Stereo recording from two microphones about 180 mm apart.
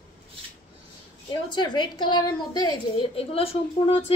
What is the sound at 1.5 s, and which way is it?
A woman's voice, 25° left (ahead or behind).